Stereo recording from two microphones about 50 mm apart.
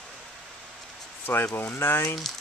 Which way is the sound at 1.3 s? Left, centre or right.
Left.